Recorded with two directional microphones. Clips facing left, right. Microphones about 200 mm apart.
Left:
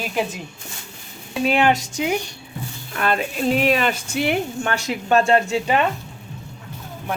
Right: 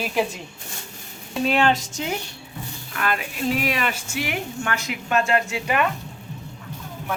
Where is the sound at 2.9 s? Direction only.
30° left (ahead or behind).